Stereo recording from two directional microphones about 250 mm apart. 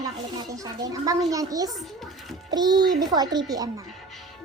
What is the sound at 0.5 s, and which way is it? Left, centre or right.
Speech, centre.